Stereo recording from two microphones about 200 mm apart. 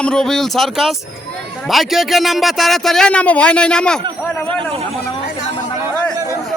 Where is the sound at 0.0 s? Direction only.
5° left (ahead or behind).